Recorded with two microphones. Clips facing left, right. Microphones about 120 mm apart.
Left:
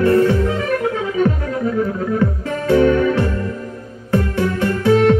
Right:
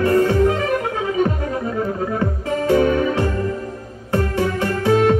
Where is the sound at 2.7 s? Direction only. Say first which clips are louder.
Left 3 dB; 20° right (ahead or behind).